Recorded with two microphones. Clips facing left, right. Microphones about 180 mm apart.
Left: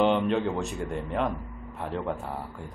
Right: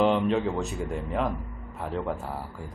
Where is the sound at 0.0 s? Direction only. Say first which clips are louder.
Even; centre (ahead or behind).